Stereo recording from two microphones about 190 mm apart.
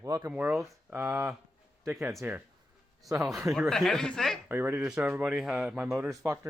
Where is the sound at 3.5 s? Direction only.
Centre (ahead or behind).